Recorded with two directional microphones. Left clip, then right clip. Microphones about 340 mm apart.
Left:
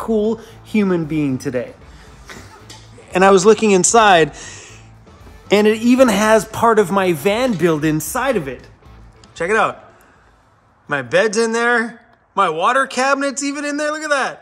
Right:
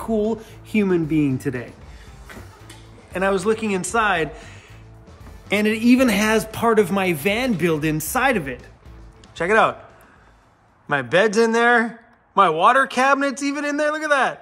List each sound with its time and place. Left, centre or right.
0.0 s speech: centre
3.1 s speech: left; by 9.8 s centre
10.9 s a man's voice: centre